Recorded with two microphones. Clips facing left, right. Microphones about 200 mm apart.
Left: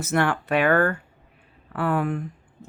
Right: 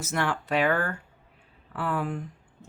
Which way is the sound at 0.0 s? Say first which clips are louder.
Left 6 dB; 60° left (ahead or behind).